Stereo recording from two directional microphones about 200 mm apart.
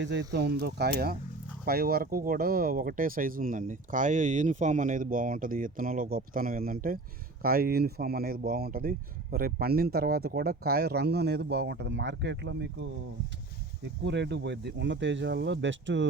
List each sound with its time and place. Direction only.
0.0 s speech: 60° right (ahead or behind)
14.0 s speech: 60° right (ahead or behind)